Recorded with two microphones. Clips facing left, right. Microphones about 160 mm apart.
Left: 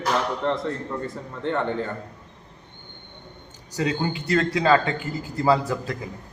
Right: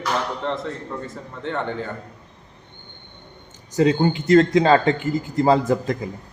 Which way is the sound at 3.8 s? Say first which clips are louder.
Right 7 dB; 35° right (ahead or behind).